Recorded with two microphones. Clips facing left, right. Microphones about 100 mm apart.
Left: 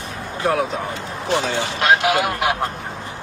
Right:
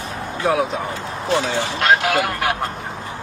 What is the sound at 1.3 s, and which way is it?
Speech, 20° left (ahead or behind).